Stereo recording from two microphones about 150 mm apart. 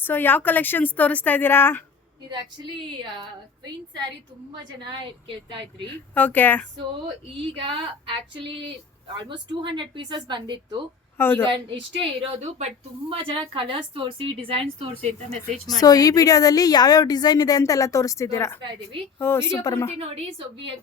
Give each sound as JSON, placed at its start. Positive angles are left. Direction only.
{"t": 0.0, "sound": "a woman's voice", "side_deg": 15}
{"t": 4.5, "sound": "a woman's voice", "side_deg": -30}
{"t": 6.1, "sound": "a woman's voice", "side_deg": 10}
{"t": 7.5, "sound": "a woman's voice", "side_deg": -35}
{"t": 11.2, "sound": "a woman's voice", "side_deg": 15}
{"t": 11.4, "sound": "a woman's voice", "side_deg": -35}
{"t": 15.8, "sound": "a woman's voice", "side_deg": 25}
{"t": 20.0, "sound": "a woman's voice", "side_deg": -40}